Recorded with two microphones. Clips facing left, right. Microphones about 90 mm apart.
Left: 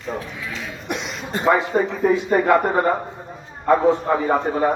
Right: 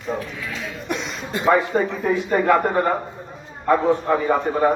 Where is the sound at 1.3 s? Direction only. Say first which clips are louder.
Even; 40° left (ahead or behind).